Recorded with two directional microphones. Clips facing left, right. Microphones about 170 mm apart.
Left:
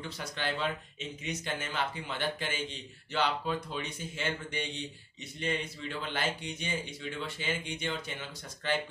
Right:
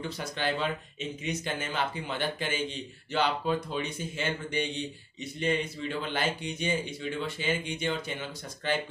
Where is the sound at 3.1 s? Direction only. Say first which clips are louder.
Right 3 dB; 15° right (ahead or behind).